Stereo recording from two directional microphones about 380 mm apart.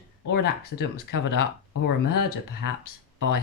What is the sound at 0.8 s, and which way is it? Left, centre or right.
Speech, left.